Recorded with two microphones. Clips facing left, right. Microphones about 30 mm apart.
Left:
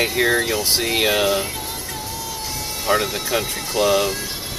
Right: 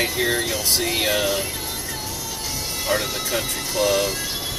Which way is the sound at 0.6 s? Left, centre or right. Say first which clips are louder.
Left 3 dB; left.